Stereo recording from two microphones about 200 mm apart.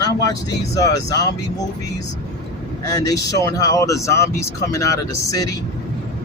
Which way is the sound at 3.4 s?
15° left (ahead or behind).